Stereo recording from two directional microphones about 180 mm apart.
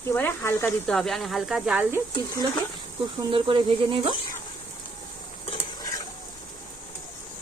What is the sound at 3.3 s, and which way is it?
Speech, 30° right (ahead or behind).